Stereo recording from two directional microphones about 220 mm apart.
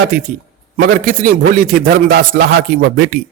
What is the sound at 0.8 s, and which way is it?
A man's voice, 40° right (ahead or behind).